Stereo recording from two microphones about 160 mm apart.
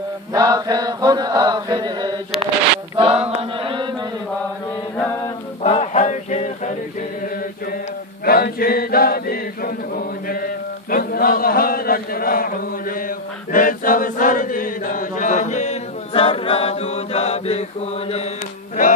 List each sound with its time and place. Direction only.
0.3 s chant: 25° right (ahead or behind)
3.0 s chant: 35° right (ahead or behind)
4.9 s mantra: 15° left (ahead or behind)
5.6 s a sound: 40° left (ahead or behind)
8.3 s chant: 70° left (ahead or behind); by 18.2 s 40° left (ahead or behind)